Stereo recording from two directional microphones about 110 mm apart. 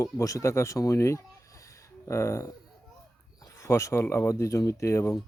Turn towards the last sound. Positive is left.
turn(degrees=25)  # may be behind; listen again after turning